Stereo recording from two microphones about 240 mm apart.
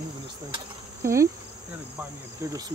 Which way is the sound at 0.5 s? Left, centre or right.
Centre.